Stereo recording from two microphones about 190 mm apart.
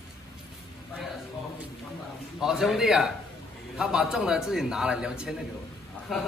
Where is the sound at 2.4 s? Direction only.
Centre (ahead or behind).